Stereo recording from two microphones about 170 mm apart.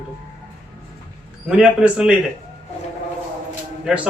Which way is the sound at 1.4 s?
5° right (ahead or behind).